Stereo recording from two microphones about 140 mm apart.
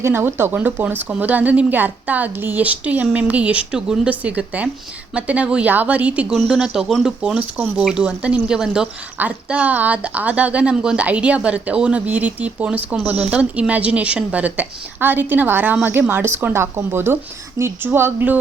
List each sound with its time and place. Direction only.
0.0 s speech: 15° right (ahead or behind)